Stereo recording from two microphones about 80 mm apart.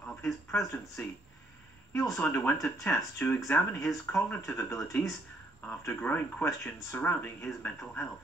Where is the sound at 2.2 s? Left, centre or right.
Centre.